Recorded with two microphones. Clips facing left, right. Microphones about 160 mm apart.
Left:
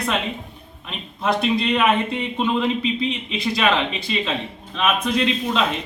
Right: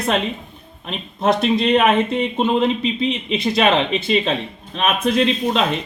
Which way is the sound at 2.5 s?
25° right (ahead or behind).